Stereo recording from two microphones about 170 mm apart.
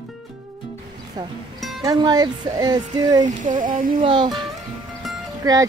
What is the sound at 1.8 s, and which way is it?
Speech, 20° right (ahead or behind).